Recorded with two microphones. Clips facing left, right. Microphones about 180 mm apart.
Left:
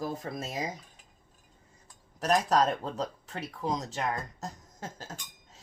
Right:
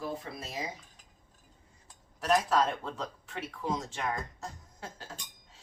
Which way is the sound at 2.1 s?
40° left (ahead or behind).